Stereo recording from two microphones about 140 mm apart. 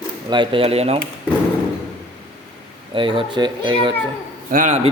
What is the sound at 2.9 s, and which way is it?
A man's voice, 40° right (ahead or behind).